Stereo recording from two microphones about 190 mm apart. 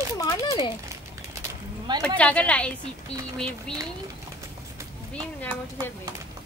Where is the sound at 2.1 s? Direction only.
5° left (ahead or behind).